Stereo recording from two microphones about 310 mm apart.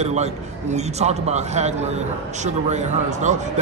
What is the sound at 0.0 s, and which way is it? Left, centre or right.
A man's voice, right.